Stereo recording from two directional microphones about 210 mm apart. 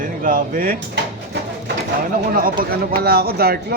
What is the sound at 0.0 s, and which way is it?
Speech, 40° right (ahead or behind).